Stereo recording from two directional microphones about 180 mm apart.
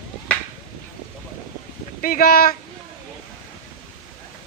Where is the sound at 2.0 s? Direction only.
50° left (ahead or behind).